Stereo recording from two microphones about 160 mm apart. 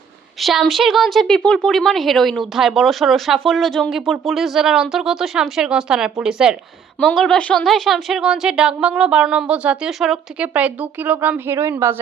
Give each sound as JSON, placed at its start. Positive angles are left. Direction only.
{"t": 0.3, "sound": "a woman's voice", "side_deg": 0}